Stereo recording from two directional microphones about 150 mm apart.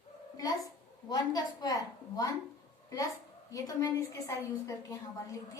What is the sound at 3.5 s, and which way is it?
A woman's voice, 25° left (ahead or behind).